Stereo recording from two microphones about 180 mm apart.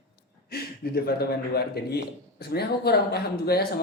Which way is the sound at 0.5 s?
60° left (ahead or behind).